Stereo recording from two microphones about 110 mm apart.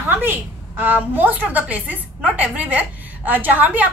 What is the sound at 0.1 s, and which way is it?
A woman's voice, 20° right (ahead or behind).